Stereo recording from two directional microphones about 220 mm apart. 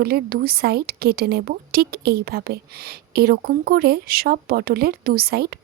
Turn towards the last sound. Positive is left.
turn(degrees=-45)  # may be behind; listen again after turning